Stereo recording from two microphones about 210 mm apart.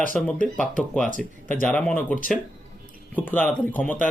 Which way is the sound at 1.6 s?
5° left (ahead or behind).